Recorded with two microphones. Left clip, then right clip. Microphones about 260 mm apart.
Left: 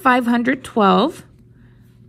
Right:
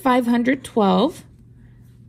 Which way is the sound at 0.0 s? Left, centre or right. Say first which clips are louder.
Left 3 dB; left.